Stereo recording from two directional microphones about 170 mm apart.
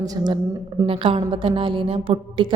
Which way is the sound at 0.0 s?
20° right (ahead or behind).